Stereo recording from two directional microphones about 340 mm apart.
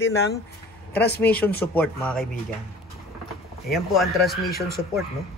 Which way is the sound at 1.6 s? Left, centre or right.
Centre.